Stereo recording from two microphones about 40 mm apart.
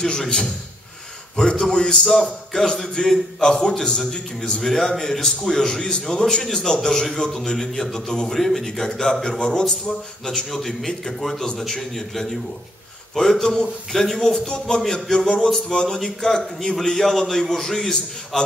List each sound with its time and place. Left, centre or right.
0.0 s a man's voice: centre
2.0 s a man's voice: centre
2.5 s a man's voice: centre
4.6 s a man's voice: centre